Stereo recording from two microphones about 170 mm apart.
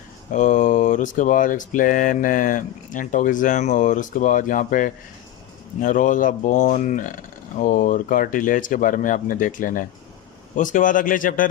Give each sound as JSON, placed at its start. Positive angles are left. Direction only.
{"t": 0.3, "sound": "speech", "side_deg": 50}